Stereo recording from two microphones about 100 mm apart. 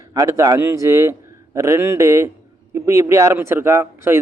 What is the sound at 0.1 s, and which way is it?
Speech, 30° right (ahead or behind).